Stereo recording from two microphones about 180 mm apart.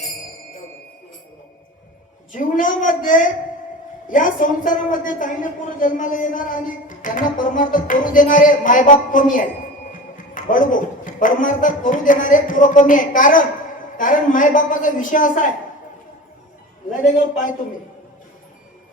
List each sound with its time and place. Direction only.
2.3 s a woman's voice: 45° left (ahead or behind)